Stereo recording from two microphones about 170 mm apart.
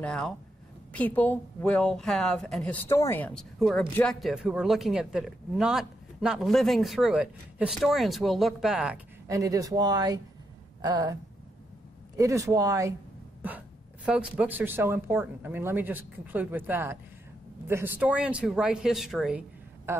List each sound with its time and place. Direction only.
0.0 s a woman's voice: 5° left (ahead or behind)
9.3 s speech: 20° right (ahead or behind)
12.2 s speech: 20° right (ahead or behind)
14.0 s speech: 10° right (ahead or behind)
19.9 s speech: 15° right (ahead or behind)